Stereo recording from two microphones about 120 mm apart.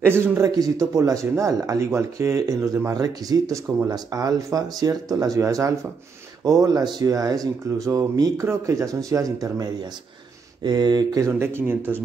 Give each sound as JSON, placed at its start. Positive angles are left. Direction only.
{"t": 0.0, "sound": "speech", "side_deg": -20}
{"t": 0.6, "sound": "speech", "side_deg": -30}